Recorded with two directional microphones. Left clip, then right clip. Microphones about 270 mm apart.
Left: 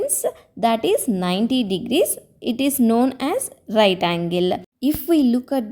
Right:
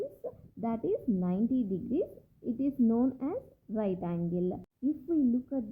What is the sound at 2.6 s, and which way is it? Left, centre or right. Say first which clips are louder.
Speech: left 11 dB; left.